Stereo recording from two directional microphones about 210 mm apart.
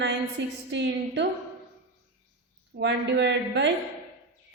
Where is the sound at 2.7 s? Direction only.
55° right (ahead or behind).